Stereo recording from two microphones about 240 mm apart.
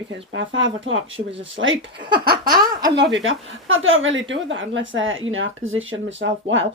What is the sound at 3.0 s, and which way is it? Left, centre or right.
Speech, right.